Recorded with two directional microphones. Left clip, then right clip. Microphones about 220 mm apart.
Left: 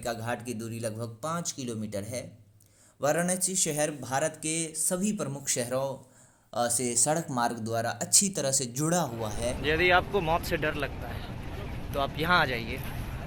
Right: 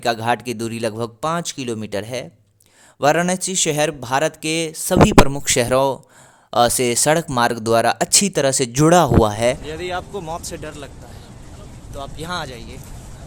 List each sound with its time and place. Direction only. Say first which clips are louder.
0.0 s speech: right 14 dB; 40° right (ahead or behind)
9.6 s speech: left 3 dB; 10° right (ahead or behind)
11.9 s speech: left 3 dB; 15° right (ahead or behind)